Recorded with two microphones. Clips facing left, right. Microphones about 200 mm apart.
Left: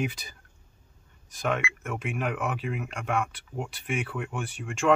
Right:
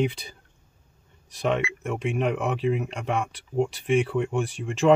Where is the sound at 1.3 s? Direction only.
30° right (ahead or behind).